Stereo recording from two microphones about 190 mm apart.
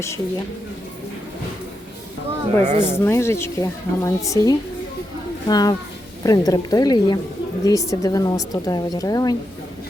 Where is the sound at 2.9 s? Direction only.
15° left (ahead or behind).